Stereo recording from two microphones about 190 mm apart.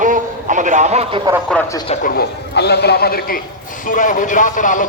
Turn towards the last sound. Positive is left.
turn(degrees=45)  # may be behind; listen again after turning